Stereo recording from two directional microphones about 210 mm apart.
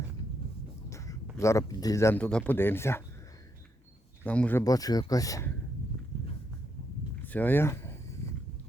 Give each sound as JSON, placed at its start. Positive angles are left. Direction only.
{"t": 0.9, "sound": "speech", "side_deg": 15}
{"t": 4.2, "sound": "speech", "side_deg": 5}
{"t": 7.2, "sound": "a sound", "side_deg": 10}